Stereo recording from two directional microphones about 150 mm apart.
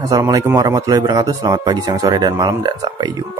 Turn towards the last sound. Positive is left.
turn(degrees=-25)  # may be behind; listen again after turning